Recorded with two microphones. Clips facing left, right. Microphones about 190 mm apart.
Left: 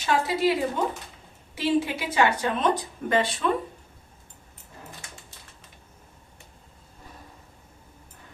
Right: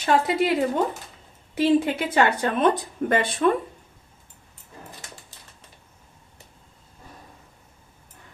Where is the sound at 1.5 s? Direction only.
55° right (ahead or behind).